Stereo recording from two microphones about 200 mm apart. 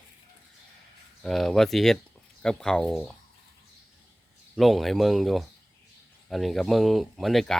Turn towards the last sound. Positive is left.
turn(degrees=0)  # may be behind; listen again after turning